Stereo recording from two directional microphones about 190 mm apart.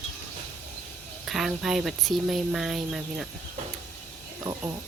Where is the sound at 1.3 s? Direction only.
Centre (ahead or behind).